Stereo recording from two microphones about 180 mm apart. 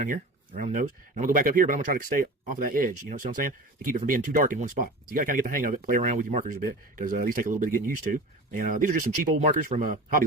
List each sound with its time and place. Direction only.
0.0 s speech: 45° right (ahead or behind)